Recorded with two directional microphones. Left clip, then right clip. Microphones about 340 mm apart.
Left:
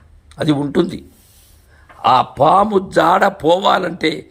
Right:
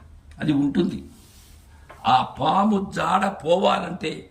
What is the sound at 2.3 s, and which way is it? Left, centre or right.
A man's voice, centre.